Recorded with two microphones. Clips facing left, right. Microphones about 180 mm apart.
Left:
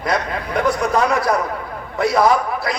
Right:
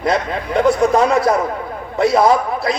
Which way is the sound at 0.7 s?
25° right (ahead or behind).